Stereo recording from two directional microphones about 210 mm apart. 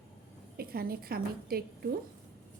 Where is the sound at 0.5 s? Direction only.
45° right (ahead or behind).